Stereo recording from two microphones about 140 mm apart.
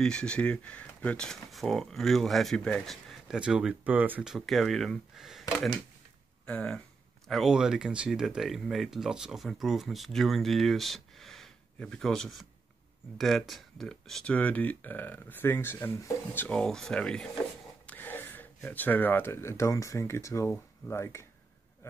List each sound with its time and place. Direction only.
0.0 s speech: 5° left (ahead or behind)
6.4 s speech: 10° left (ahead or behind)
16.4 s speech: 5° left (ahead or behind)